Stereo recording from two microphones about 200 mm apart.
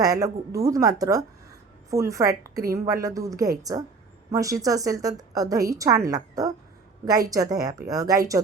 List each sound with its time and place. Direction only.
0.0 s a woman's voice: 15° right (ahead or behind)